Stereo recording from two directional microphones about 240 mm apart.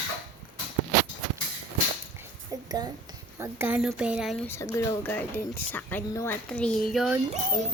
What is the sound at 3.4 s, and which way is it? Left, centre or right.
Speech, centre.